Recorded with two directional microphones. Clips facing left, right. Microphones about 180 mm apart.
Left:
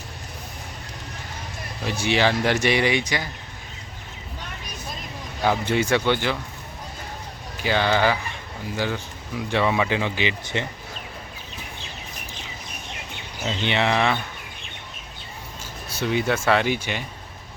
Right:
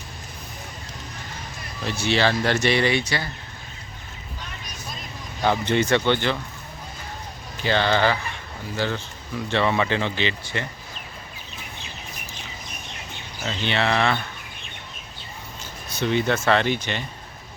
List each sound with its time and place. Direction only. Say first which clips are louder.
1.8 s speech: even; 15° left (ahead or behind)
5.4 s speech: right 1 dB; 5° left (ahead or behind)
7.6 s speech: even; 10° left (ahead or behind)
13.4 s speech: left 1 dB; 20° left (ahead or behind)
15.9 s speech: right 1 dB; 5° left (ahead or behind)